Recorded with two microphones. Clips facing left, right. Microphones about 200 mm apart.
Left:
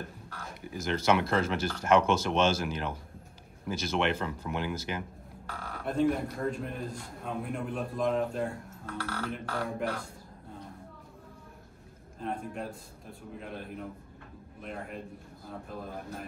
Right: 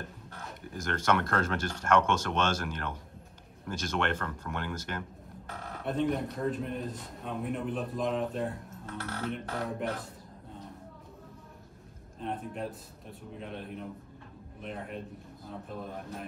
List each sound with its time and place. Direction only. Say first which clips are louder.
0.6 s a man's voice: left 3 dB; 5° left (ahead or behind)
8.8 s speech: left 2 dB; 20° right (ahead or behind)
9.6 s a man's voice: left 3 dB; centre (ahead or behind)
12.2 s a man's voice: even; centre (ahead or behind)